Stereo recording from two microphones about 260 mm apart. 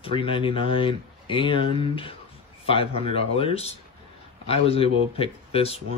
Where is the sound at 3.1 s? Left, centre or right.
Left.